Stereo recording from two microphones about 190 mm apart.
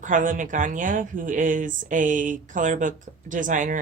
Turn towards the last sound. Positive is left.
turn(degrees=-45)  # may be behind; listen again after turning